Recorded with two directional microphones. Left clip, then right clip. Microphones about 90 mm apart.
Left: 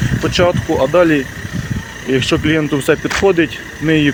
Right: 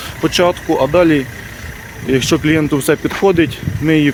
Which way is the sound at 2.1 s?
70° right (ahead or behind).